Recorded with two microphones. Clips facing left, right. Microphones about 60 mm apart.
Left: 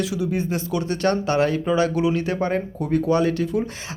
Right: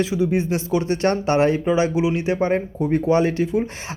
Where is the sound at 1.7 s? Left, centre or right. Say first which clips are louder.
Right 1 dB; centre.